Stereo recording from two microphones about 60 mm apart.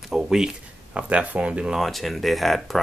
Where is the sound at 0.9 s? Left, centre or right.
Right.